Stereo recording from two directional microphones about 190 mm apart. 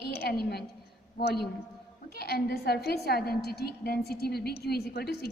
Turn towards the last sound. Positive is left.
turn(degrees=55)  # may be behind; listen again after turning